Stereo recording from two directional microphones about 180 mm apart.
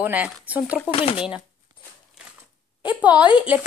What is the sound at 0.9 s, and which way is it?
Speech, 30° left (ahead or behind).